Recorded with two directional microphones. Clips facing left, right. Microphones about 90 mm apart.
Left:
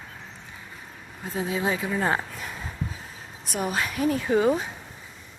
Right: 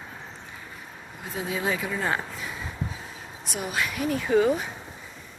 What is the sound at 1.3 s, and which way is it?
Speech, 30° left (ahead or behind).